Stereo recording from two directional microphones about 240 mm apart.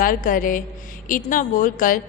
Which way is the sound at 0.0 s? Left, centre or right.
Left.